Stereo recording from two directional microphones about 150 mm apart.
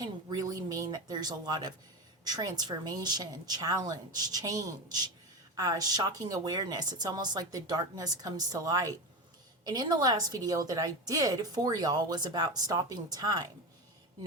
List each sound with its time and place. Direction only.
0.0 s speech: 25° right (ahead or behind)